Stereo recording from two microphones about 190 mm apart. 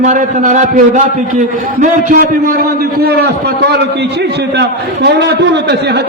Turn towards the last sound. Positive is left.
turn(degrees=-60)  # may be behind; listen again after turning